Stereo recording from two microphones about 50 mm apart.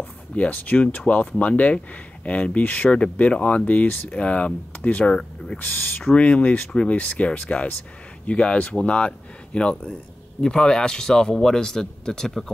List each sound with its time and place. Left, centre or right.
0.5 s speech: left
5.6 s speech: left; by 12.4 s centre